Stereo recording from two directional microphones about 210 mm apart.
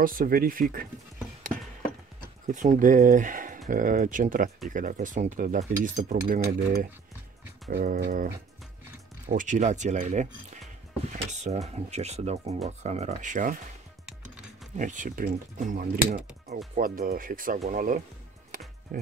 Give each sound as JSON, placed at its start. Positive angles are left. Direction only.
{"t": 0.0, "sound": "speech", "side_deg": -45}
{"t": 2.4, "sound": "speech", "side_deg": -35}
{"t": 9.3, "sound": "speech", "side_deg": -35}
{"t": 14.8, "sound": "speech", "side_deg": -40}
{"t": 18.5, "sound": "music", "side_deg": -40}
{"t": 18.9, "sound": "speech", "side_deg": -40}